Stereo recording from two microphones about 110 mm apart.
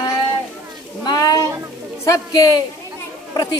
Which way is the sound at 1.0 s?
35° left (ahead or behind).